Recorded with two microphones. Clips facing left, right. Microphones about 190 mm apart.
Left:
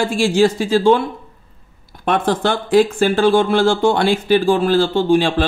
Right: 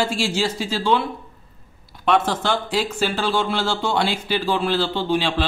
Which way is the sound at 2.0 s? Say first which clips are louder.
Left 3 dB; 50° left (ahead or behind).